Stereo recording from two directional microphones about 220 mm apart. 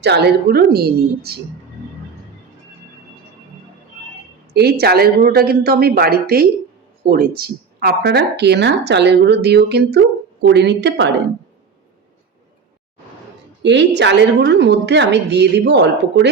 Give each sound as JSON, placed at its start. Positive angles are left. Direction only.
{"t": 0.0, "sound": "speech", "side_deg": -50}
{"t": 4.5, "sound": "speech", "side_deg": -45}
{"t": 13.6, "sound": "speech", "side_deg": -50}